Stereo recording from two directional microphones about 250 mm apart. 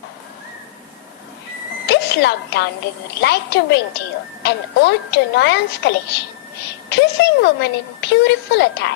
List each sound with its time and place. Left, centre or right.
1.9 s a woman's voice: left